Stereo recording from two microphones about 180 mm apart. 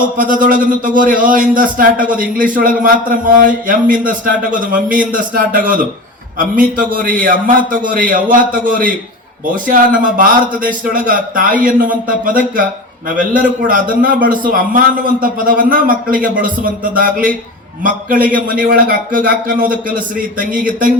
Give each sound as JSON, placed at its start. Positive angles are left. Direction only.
{"t": 0.2, "sound": "a man's voice", "side_deg": -50}